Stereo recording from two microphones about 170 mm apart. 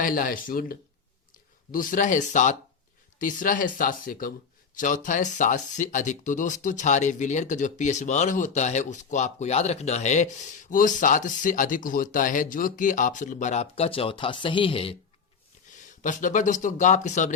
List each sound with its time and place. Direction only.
0.0 s speech: 55° left (ahead or behind); by 14.9 s 35° left (ahead or behind)
15.7 s speech: 50° left (ahead or behind)